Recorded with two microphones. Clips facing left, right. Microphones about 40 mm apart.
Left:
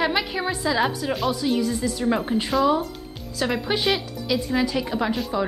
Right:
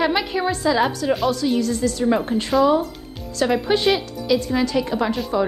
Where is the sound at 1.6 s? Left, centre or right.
Centre.